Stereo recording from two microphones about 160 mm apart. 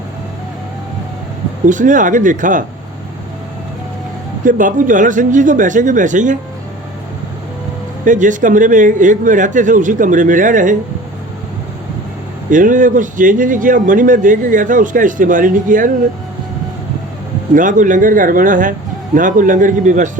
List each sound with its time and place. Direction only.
1.6 s speech: 55° right (ahead or behind)
4.4 s speech: 55° right (ahead or behind)
8.0 s a man's voice: 55° right (ahead or behind)
12.5 s a man's voice: 55° right (ahead or behind)
17.5 s a man's voice: 55° right (ahead or behind)